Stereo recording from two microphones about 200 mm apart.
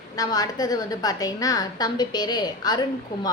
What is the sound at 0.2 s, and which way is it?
A woman's voice, 20° left (ahead or behind).